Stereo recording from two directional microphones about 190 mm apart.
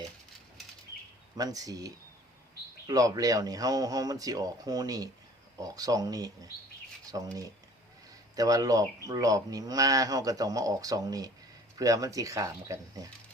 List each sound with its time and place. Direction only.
1.4 s speech: 20° right (ahead or behind)
7.0 s a sound: 20° right (ahead or behind)
8.4 s speech: 20° right (ahead or behind)